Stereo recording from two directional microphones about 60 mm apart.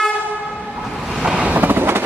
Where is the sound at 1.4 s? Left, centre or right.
Right.